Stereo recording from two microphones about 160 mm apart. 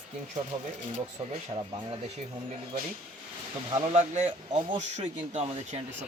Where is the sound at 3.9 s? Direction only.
45° right (ahead or behind).